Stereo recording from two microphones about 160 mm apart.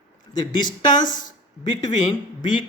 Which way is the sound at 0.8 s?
25° left (ahead or behind).